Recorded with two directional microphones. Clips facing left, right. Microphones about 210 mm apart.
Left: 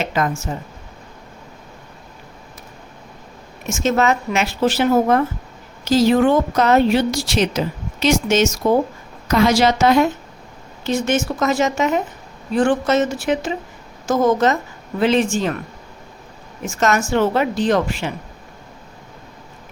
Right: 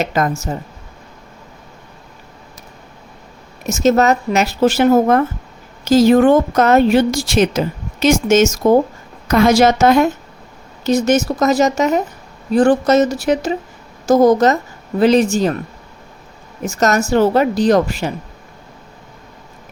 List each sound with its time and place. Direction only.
0.0 s speech: 40° right (ahead or behind)
3.7 s a woman's voice: 40° right (ahead or behind)
16.6 s speech: 40° right (ahead or behind)